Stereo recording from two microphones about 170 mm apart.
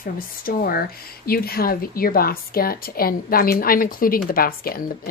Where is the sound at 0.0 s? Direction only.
60° left (ahead or behind).